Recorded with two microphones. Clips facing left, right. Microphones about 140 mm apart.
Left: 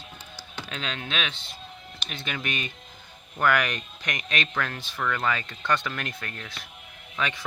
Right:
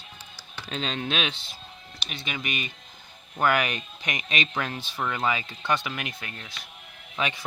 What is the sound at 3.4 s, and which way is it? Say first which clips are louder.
Speech: even; 20° right (ahead or behind).